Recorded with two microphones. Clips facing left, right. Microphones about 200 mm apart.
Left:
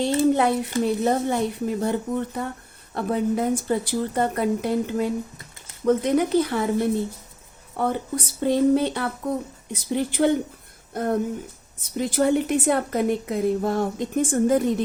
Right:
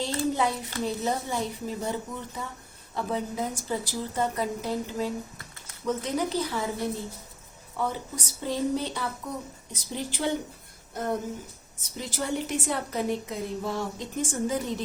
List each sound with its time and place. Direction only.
0.0 s a woman's voice: 60° left (ahead or behind)
7.8 s a woman's voice: 60° left (ahead or behind)